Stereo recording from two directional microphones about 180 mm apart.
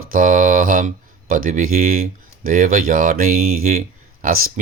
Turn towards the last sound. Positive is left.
turn(degrees=-55)  # may be behind; listen again after turning